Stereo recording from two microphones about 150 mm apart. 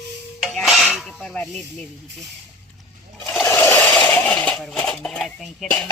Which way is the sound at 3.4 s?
15° left (ahead or behind).